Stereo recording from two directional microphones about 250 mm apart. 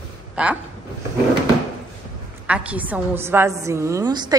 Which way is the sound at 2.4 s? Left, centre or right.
Centre.